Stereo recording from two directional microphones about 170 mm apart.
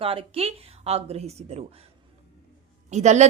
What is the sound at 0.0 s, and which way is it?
Speech, 35° right (ahead or behind).